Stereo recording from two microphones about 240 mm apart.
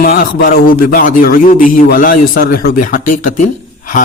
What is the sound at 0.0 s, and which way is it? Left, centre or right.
Speech, left.